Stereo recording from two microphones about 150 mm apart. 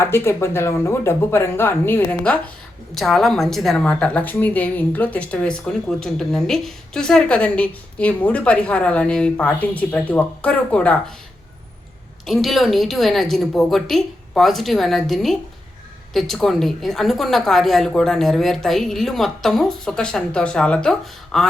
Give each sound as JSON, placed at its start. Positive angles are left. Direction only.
{"t": 0.0, "sound": "a woman's voice", "side_deg": 15}
{"t": 12.2, "sound": "a woman's voice", "side_deg": 0}